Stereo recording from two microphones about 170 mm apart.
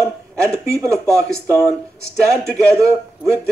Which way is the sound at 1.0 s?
5° left (ahead or behind).